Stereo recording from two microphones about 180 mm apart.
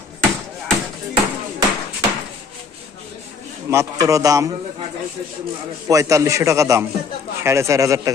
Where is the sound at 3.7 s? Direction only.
15° right (ahead or behind).